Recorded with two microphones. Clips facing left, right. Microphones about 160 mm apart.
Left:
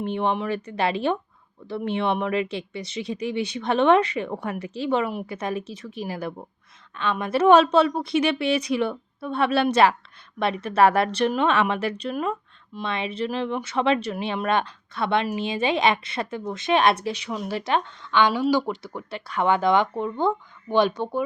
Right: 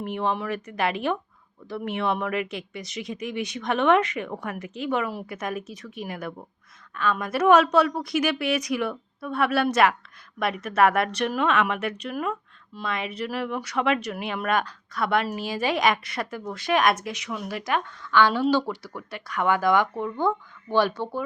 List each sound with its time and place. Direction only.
0.0 s a woman's voice: 25° left (ahead or behind)